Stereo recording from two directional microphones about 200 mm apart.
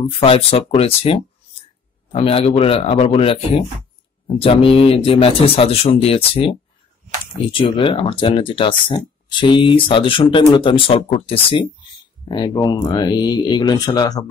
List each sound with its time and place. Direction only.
0.0 s speech: 30° left (ahead or behind)
7.5 s speech: 25° left (ahead or behind)